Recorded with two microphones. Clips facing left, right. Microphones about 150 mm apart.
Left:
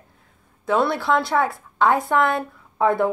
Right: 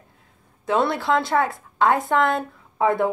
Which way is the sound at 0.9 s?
20° right (ahead or behind).